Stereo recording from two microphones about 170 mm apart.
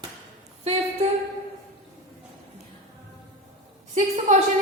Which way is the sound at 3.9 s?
45° right (ahead or behind).